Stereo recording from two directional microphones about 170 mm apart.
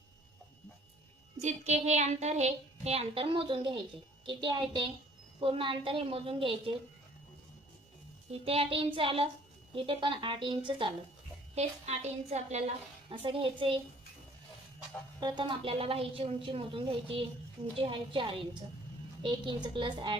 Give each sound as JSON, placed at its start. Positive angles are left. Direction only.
{"t": 1.4, "sound": "a woman's voice", "side_deg": -40}
{"t": 8.3, "sound": "a woman's voice", "side_deg": -35}
{"t": 11.5, "sound": "a woman's voice", "side_deg": -40}
{"t": 15.2, "sound": "a woman's voice", "side_deg": -25}